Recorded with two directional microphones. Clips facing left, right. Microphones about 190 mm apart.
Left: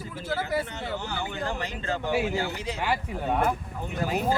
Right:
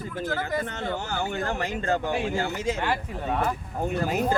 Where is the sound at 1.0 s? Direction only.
45° right (ahead or behind).